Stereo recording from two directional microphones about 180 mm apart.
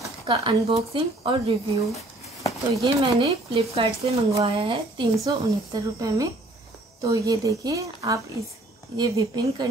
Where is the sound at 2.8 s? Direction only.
25° right (ahead or behind).